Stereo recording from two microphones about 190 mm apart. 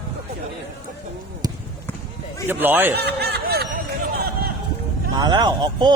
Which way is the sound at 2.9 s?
60° right (ahead or behind).